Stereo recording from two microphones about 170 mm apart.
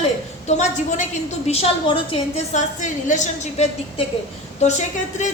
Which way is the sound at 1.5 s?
35° left (ahead or behind).